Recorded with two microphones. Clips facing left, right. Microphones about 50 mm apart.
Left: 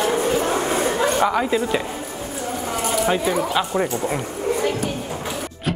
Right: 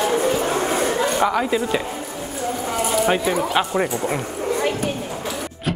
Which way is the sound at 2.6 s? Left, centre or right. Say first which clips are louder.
Right 1 dB; centre.